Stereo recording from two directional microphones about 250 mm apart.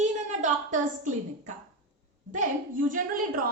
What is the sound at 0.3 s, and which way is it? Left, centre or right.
A woman's voice, right.